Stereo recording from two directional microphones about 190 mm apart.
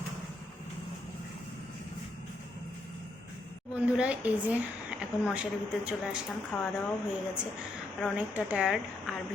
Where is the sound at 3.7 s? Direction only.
5° right (ahead or behind).